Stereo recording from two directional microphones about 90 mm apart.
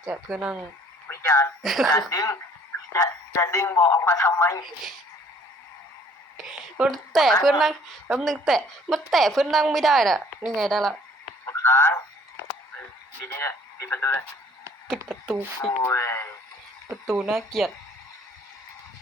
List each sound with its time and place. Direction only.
0.1 s speech: 10° right (ahead or behind)
1.0 s a sound: 30° left (ahead or behind)
1.6 s a woman's voice: centre (ahead or behind)
1.9 s speech: 40° left (ahead or behind)
6.3 s a sound: 5° right (ahead or behind)
6.9 s a woman's voice: centre (ahead or behind)
11.5 s a sound: 25° left (ahead or behind)
13.2 s speech: 30° left (ahead or behind)
14.8 s speech: 5° right (ahead or behind)
15.6 s speech: 35° left (ahead or behind)
17.3 s a woman's voice: centre (ahead or behind)